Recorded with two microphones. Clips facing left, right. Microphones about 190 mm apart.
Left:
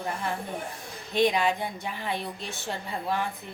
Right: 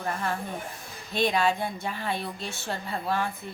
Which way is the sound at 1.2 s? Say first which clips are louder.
Left 1 dB; 15° left (ahead or behind).